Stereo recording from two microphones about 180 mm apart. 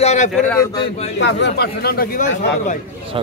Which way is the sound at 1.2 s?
75° left (ahead or behind).